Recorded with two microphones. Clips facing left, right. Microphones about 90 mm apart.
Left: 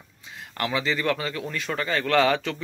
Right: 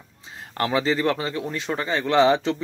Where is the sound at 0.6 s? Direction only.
35° right (ahead or behind).